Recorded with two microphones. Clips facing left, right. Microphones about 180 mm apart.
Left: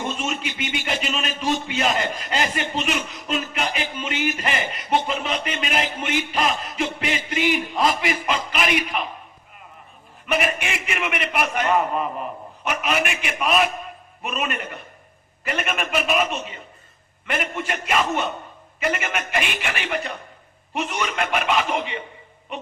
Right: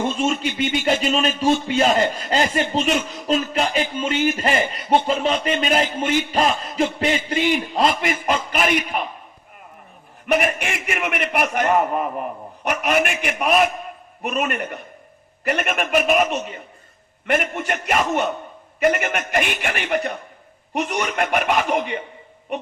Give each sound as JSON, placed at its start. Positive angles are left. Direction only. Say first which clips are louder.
{"t": 0.0, "sound": "a man's voice", "louder": "right 6 dB", "side_deg": -40}
{"t": 7.9, "sound": "a man's voice", "louder": "right 1 dB", "side_deg": -50}
{"t": 10.4, "sound": "a man's voice", "louder": "right 2 dB", "side_deg": -50}